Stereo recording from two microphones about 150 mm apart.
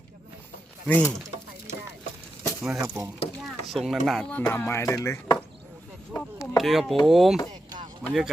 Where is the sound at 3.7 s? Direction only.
Centre (ahead or behind); by 4.9 s 20° left (ahead or behind).